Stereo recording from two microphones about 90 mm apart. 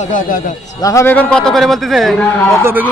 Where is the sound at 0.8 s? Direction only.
35° left (ahead or behind).